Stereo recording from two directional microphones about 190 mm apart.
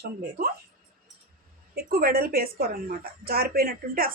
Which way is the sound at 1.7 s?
50° right (ahead or behind).